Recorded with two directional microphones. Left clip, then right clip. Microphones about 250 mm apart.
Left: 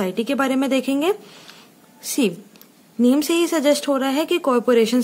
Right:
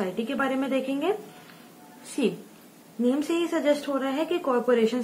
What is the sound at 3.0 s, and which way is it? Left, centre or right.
A woman's voice, left.